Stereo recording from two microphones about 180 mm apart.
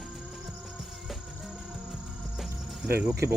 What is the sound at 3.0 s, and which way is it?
Speech, 10° right (ahead or behind).